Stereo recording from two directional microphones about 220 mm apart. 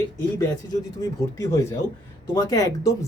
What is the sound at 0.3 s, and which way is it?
Speech, 15° left (ahead or behind).